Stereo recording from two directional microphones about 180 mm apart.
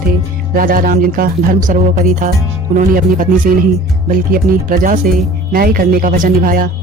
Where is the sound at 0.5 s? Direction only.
50° right (ahead or behind).